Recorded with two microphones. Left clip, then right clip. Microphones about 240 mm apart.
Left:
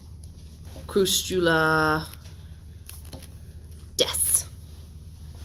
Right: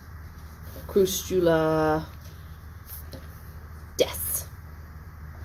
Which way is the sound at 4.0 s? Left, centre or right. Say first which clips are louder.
Left 1 dB; left.